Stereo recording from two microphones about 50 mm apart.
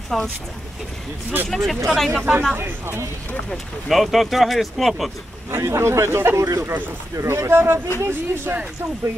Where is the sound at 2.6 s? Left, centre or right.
Right.